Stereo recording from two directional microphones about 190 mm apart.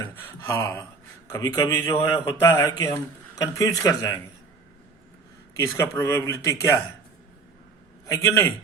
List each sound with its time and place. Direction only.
0.2 s speech: 10° left (ahead or behind)
5.5 s speech: 15° left (ahead or behind)
8.0 s speech: 15° left (ahead or behind)